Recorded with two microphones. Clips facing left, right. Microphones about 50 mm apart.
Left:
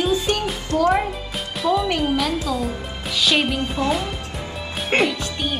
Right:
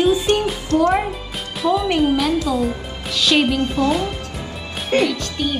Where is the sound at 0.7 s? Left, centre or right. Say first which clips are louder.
Right 3 dB; right.